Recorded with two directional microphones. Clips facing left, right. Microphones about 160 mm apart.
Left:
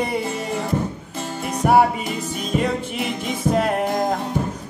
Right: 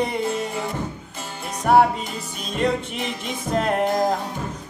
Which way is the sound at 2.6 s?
5° left (ahead or behind).